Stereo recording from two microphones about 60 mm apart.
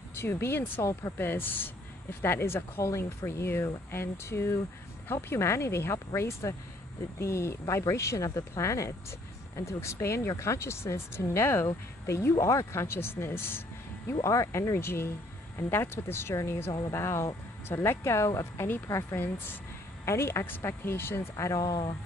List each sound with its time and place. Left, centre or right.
0.1 s speech: left
2.8 s speech: left
12.4 s speech: left
14.2 s speech: left